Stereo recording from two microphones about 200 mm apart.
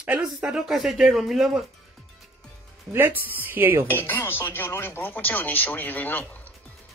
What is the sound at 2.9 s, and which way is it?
Speech, 10° right (ahead or behind).